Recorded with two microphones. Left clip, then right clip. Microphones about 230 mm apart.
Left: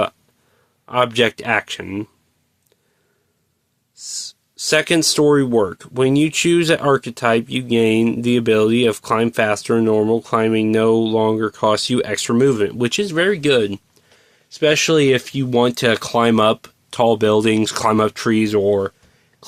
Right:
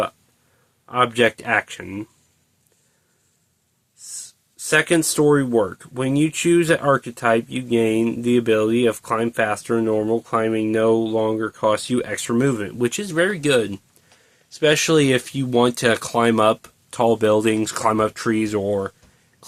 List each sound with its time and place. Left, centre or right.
0.9 s speech: left
4.6 s speech: left